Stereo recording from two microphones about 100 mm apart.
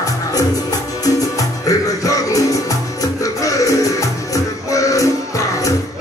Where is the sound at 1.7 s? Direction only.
35° left (ahead or behind).